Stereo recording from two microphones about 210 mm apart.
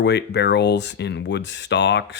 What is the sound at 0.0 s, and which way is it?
Speech, 55° left (ahead or behind).